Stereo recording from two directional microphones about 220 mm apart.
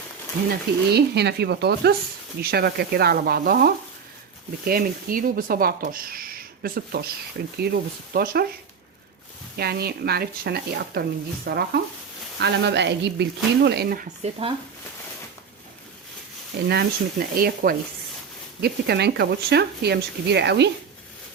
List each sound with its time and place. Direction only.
0.9 s speech: 50° right (ahead or behind)
9.6 s speech: 45° right (ahead or behind)
16.6 s speech: 45° right (ahead or behind)